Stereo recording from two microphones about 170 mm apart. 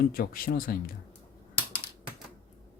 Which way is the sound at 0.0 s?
60° left (ahead or behind).